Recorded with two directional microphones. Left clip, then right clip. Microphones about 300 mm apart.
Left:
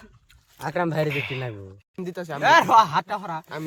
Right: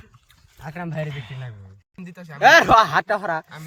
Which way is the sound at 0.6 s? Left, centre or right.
Left.